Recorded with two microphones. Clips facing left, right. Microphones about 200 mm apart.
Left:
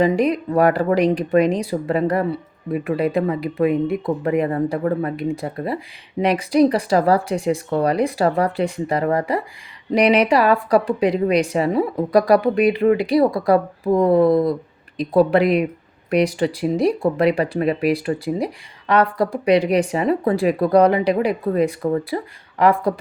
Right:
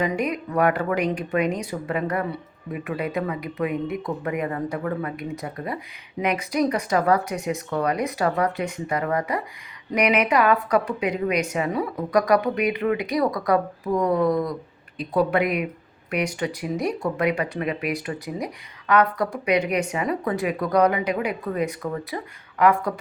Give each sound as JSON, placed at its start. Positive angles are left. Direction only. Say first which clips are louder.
{"t": 0.0, "sound": "speech", "louder": "left 7 dB", "side_deg": 35}